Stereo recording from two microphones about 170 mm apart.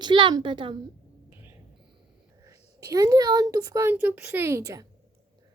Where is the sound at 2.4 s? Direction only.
20° right (ahead or behind).